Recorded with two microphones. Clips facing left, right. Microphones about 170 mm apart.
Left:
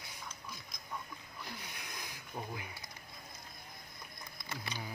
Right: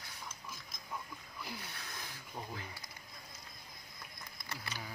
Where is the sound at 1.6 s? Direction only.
15° left (ahead or behind).